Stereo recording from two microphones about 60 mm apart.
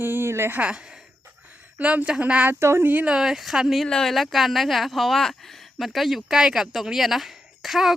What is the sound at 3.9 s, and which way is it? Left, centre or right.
Speech, centre.